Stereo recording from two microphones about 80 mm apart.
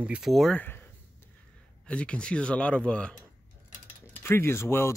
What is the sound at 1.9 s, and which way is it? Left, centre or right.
Speech, centre.